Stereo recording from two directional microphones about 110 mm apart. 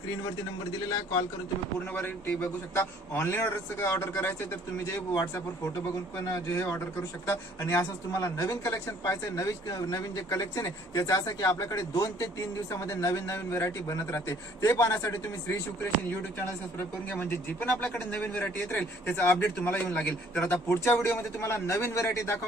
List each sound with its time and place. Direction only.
1.9 s speech: 20° left (ahead or behind)
6.3 s speech: 25° left (ahead or behind)